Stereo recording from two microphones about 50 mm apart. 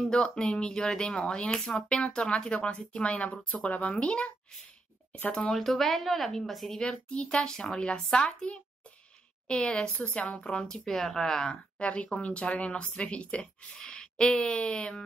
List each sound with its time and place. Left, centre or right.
0.0 s a woman's voice: centre
3.6 s speech: left
5.5 s speech: centre
6.8 s a woman's voice: centre
9.9 s speech: left
10.2 s a woman's voice: centre
10.9 s a woman's voice: centre